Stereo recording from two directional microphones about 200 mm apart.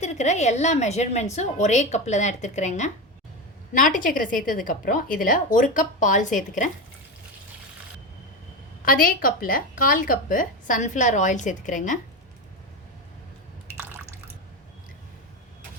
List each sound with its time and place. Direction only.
0.0 s a woman's voice: 35° left (ahead or behind)
8.8 s a woman's voice: 45° left (ahead or behind)
13.7 s water: 10° right (ahead or behind)